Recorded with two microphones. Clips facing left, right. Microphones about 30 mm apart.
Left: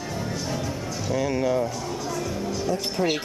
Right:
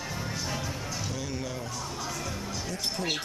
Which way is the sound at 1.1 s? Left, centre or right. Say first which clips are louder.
Left 11 dB; centre.